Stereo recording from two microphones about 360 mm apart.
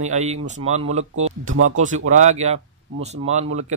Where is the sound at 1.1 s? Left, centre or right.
Right.